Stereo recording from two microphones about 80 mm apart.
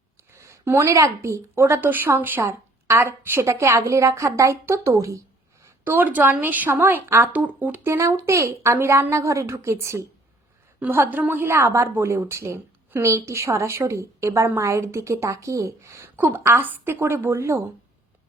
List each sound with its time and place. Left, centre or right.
0.3 s a woman's voice: right
5.8 s a woman's voice: right
7.9 s a woman's voice: right
10.8 s a woman's voice: right
16.1 s a woman's voice: right
16.4 s a woman's voice: right